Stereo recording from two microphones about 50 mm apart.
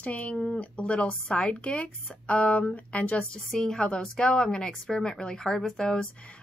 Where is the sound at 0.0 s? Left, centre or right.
Left.